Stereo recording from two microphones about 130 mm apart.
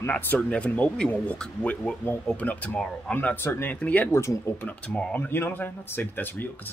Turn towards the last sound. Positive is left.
turn(degrees=15)  # may be behind; listen again after turning